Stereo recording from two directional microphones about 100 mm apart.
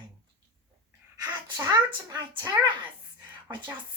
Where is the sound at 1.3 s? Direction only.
45° right (ahead or behind).